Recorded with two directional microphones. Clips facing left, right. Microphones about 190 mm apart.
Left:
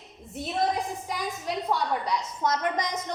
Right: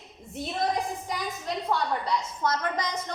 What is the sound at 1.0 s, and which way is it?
A woman's voice, 10° left (ahead or behind).